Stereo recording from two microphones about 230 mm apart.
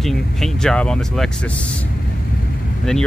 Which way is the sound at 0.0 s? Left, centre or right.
Centre.